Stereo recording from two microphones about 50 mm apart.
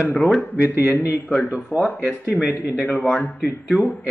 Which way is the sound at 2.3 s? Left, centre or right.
Left.